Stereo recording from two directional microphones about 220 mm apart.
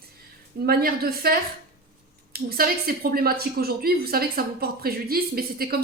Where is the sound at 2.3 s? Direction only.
45° right (ahead or behind).